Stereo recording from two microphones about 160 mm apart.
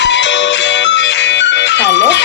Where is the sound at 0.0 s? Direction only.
90° left.